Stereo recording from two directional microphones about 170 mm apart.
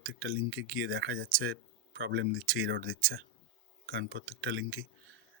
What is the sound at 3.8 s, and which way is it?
Speech, 90° right.